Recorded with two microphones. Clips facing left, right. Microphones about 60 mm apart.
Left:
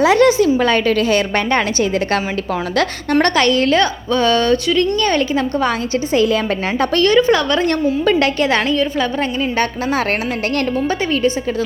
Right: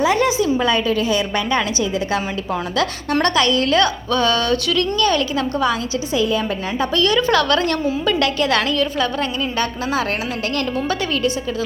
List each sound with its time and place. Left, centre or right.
0.0 s a woman's voice: left
1.5 s a woman's voice: left
6.1 s a woman's voice: left
6.9 s a woman's voice: left
7.2 s a woman's voice: left
9.6 s a woman's voice: left
10.8 s a woman's voice: left